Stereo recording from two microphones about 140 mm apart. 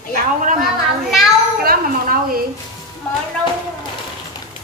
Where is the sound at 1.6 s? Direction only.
90° right.